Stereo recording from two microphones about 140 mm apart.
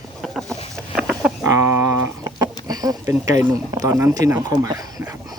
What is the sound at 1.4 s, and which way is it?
Speech, 20° right (ahead or behind).